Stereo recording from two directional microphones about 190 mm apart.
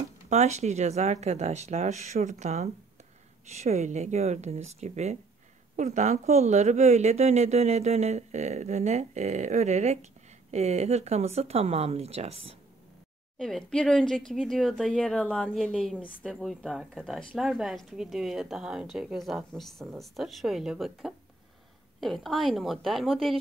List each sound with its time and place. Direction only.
0.3 s speech: 35° right (ahead or behind)
13.4 s speech: centre (ahead or behind)